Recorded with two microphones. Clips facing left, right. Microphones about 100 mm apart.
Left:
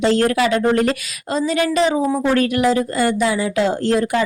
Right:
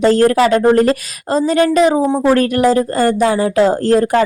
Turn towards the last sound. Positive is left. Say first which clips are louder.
# right 5 dB
turn(degrees=-40)  # may be behind; listen again after turning